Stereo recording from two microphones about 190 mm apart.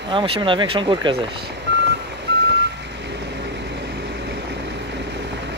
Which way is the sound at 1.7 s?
65° right (ahead or behind).